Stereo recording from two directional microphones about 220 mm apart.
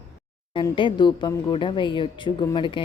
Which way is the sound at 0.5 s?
20° left (ahead or behind).